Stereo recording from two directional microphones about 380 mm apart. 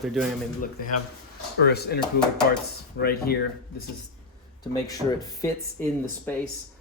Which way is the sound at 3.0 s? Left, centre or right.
Left.